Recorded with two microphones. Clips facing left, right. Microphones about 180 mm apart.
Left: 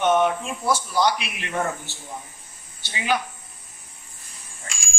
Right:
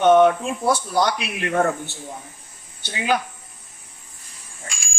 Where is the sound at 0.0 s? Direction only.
55° right (ahead or behind).